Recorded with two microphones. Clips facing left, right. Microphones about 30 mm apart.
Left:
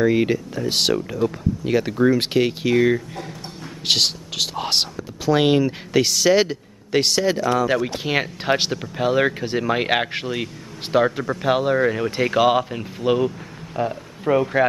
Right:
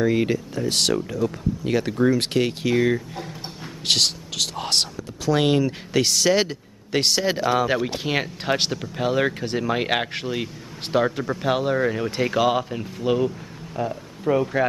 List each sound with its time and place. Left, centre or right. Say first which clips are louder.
0.0 s speech: left 3 dB; centre